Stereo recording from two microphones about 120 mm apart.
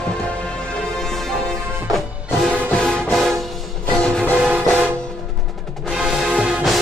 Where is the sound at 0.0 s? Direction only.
5° left (ahead or behind).